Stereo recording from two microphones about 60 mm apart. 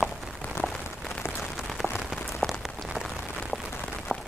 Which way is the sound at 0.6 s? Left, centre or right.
Left.